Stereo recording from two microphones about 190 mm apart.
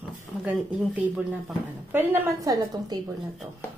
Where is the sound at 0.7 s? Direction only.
5° right (ahead or behind).